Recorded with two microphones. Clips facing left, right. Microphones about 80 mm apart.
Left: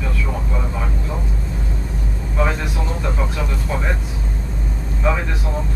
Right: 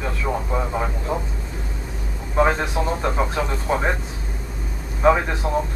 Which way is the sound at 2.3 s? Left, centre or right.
Right.